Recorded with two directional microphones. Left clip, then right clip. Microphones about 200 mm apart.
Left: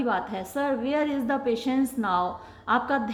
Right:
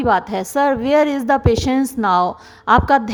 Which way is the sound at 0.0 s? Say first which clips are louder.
Right 11 dB; 45° right (ahead or behind).